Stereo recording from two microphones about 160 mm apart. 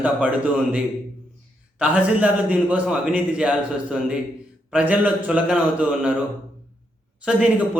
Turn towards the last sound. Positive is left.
turn(degrees=-5)  # may be behind; listen again after turning